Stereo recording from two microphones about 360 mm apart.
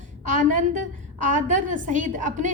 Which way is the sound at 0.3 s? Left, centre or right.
Right.